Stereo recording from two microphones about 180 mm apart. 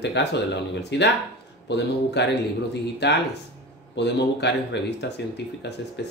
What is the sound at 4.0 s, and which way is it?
A man's voice, 70° left (ahead or behind).